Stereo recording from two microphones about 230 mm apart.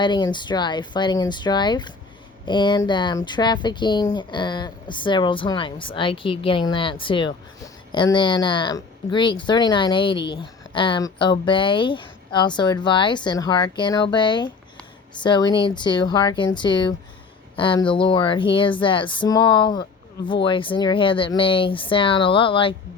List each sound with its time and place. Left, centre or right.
0.0 s speech: centre